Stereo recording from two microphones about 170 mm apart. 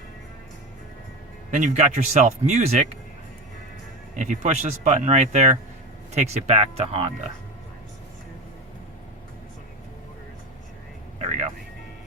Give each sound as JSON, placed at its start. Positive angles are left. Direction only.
{"t": 1.5, "sound": "speech", "side_deg": -45}
{"t": 4.1, "sound": "speech", "side_deg": -45}
{"t": 11.2, "sound": "vehicle", "side_deg": -40}